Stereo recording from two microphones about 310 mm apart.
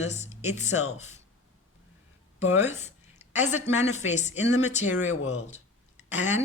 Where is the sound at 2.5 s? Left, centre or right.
Centre.